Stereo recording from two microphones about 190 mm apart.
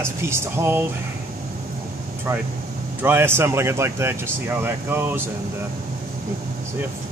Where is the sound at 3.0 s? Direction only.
10° right (ahead or behind).